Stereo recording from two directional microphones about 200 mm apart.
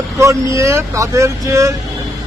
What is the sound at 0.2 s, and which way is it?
Speech, 15° right (ahead or behind).